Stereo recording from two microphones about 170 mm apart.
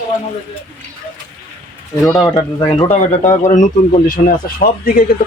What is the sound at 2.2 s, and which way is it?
Speech, 20° left (ahead or behind).